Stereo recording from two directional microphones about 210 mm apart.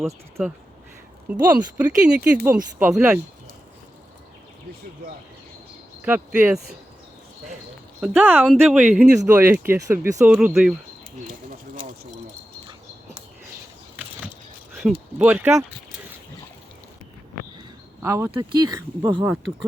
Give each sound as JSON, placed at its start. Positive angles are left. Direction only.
{"t": 0.0, "sound": "speech", "side_deg": 0}
{"t": 1.5, "sound": "speech", "side_deg": -5}
{"t": 6.1, "sound": "speech", "side_deg": -10}
{"t": 8.0, "sound": "speech", "side_deg": -5}
{"t": 11.3, "sound": "bird", "side_deg": -40}
{"t": 14.7, "sound": "a sound", "side_deg": -5}
{"t": 15.2, "sound": "speech", "side_deg": -10}
{"t": 18.0, "sound": "speech", "side_deg": -15}